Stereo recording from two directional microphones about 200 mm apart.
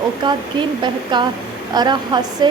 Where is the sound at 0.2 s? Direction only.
25° right (ahead or behind).